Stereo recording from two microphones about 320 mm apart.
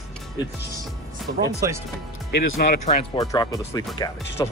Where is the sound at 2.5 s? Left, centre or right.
Left.